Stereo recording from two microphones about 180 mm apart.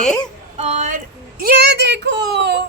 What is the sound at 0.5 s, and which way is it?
Speech, 40° right (ahead or behind).